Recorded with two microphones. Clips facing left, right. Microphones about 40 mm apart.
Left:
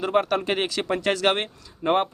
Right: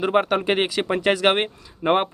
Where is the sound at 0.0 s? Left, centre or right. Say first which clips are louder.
Right 3 dB; right.